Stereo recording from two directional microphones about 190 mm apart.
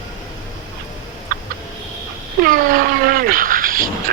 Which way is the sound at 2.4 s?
50° right (ahead or behind).